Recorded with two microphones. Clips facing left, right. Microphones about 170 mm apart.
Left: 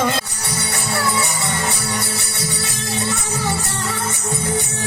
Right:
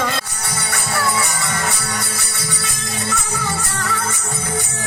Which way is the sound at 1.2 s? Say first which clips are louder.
Even; 20° left (ahead or behind).